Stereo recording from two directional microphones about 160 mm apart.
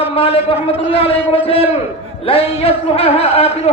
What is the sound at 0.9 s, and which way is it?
A man's voice, 35° left (ahead or behind).